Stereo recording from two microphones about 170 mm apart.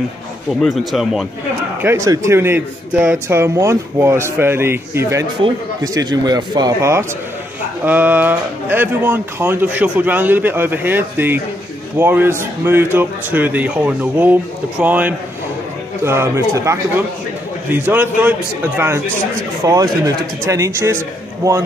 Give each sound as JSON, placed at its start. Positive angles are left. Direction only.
{"t": 0.6, "sound": "speech", "side_deg": 0}
{"t": 1.8, "sound": "a man's voice", "side_deg": -15}
{"t": 19.6, "sound": "speech", "side_deg": -20}